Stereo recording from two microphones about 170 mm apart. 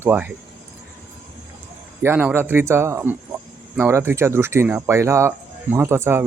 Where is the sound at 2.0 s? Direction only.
10° right (ahead or behind).